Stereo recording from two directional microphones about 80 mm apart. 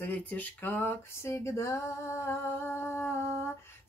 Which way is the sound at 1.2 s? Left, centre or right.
Left.